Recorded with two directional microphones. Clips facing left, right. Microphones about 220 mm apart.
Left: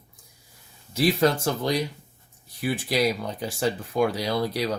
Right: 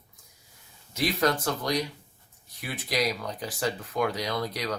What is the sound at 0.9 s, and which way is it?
Speech, 30° left (ahead or behind).